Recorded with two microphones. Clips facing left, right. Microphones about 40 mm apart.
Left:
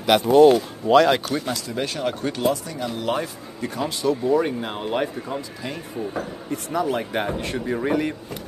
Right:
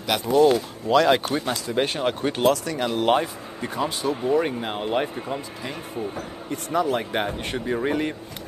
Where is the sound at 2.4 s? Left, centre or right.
Right.